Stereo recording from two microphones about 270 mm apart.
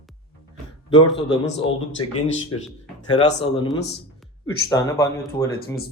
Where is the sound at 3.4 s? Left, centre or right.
Centre.